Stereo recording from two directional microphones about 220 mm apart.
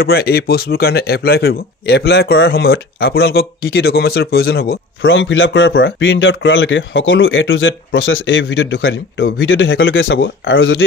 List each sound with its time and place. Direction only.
0.0 s a man's voice: 45° left (ahead or behind); by 10.8 s 60° left (ahead or behind)